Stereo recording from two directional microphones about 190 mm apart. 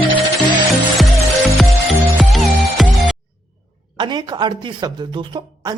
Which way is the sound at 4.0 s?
25° right (ahead or behind).